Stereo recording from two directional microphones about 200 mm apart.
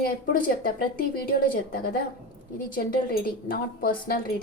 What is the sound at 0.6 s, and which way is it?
A woman's voice, 45° left (ahead or behind).